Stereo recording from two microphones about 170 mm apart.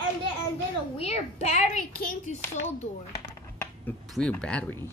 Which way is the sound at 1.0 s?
40° left (ahead or behind).